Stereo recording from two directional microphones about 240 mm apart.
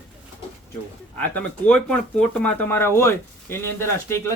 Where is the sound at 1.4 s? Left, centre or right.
Centre.